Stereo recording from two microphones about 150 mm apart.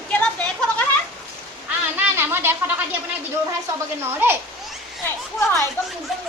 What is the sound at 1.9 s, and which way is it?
Speech, 15° right (ahead or behind).